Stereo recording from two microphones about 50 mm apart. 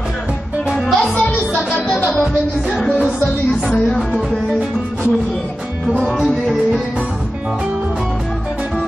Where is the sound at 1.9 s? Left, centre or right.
Left.